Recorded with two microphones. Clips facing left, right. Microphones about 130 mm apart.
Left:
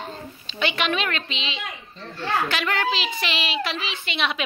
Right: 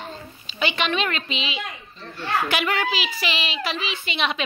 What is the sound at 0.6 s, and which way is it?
A child's voice, centre (ahead or behind).